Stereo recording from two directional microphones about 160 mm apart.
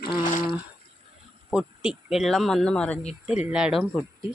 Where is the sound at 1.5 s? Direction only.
5° right (ahead or behind).